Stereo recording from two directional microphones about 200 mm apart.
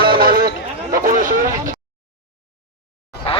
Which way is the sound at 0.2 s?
45° right (ahead or behind).